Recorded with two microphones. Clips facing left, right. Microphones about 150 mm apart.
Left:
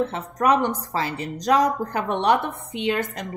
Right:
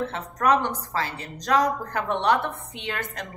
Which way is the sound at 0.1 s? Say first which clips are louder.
Left 2 dB; 15° left (ahead or behind).